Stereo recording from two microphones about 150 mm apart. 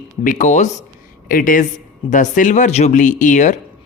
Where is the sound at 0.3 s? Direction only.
55° left (ahead or behind).